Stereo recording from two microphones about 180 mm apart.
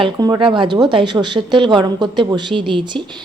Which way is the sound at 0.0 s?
25° right (ahead or behind).